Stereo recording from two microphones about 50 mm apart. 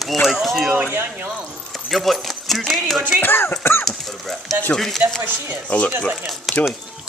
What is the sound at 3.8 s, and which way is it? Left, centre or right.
Speech, centre.